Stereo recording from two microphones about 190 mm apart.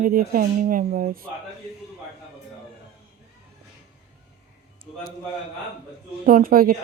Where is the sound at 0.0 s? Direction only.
50° right (ahead or behind).